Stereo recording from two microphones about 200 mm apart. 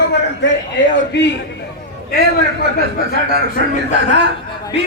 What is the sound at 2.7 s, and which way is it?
Speech, 45° left (ahead or behind).